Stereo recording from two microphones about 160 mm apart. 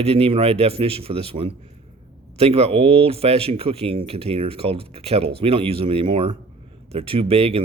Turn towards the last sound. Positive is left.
turn(degrees=-40)  # may be behind; listen again after turning